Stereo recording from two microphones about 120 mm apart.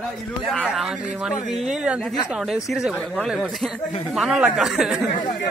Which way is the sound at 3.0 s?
10° left (ahead or behind).